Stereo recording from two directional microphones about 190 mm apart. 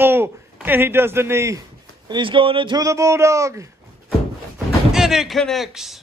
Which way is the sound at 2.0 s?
25° right (ahead or behind).